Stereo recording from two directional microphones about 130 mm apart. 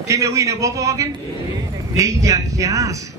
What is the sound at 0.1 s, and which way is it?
A man's voice, 25° right (ahead or behind).